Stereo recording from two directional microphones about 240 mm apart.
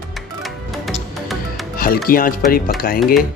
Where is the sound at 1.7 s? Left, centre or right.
Left.